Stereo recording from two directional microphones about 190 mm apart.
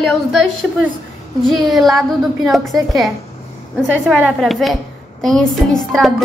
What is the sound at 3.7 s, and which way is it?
A woman's voice, centre (ahead or behind).